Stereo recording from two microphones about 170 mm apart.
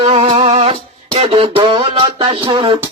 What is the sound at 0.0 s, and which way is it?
Music, 35° right (ahead or behind).